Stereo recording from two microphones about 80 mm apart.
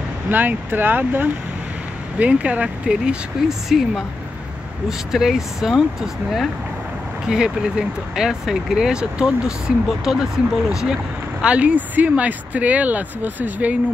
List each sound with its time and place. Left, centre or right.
0.3 s speech: right; by 5.9 s centre
7.2 s speech: centre
11.4 s speech: centre